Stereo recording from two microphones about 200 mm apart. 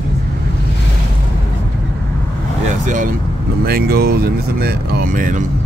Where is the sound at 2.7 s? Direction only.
40° right (ahead or behind).